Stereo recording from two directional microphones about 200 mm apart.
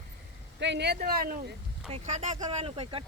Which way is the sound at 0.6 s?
60° right (ahead or behind).